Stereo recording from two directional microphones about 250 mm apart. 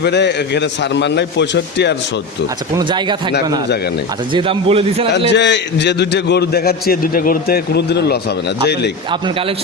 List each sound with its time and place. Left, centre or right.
0.0 s a man's voice: left
2.7 s a man's voice: centre
5.3 s a man's voice: left
9.0 s a man's voice: centre